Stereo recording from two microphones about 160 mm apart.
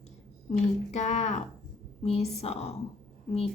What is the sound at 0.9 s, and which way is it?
A woman's voice, 45° left (ahead or behind).